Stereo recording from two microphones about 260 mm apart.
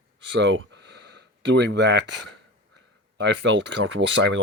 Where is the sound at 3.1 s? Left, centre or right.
Right.